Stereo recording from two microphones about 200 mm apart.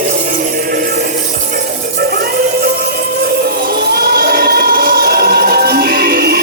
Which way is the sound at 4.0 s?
50° right (ahead or behind).